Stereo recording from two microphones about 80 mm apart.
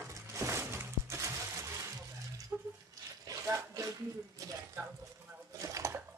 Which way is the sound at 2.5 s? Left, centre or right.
Right.